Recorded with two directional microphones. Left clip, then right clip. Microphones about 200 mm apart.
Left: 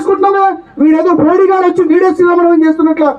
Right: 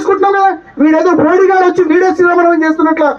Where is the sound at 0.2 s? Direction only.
30° right (ahead or behind).